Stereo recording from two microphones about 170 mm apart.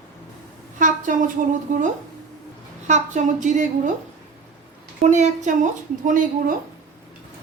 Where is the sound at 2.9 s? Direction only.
45° right (ahead or behind).